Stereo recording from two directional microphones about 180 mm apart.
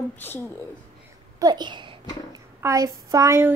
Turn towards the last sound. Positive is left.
turn(degrees=-15)  # may be behind; listen again after turning